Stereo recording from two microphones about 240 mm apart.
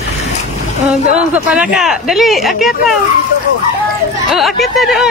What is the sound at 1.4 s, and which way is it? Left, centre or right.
Speech, centre.